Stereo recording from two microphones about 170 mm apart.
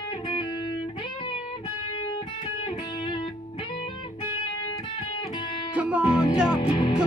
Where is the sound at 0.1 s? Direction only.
25° left (ahead or behind).